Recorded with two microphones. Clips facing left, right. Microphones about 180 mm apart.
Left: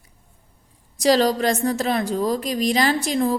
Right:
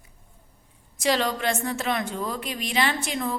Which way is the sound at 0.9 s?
35° left (ahead or behind).